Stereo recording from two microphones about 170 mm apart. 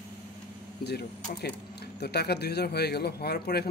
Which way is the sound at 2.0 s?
70° left (ahead or behind).